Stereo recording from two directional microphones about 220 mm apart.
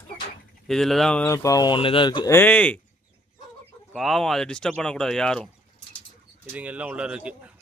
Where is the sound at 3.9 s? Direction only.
Centre (ahead or behind).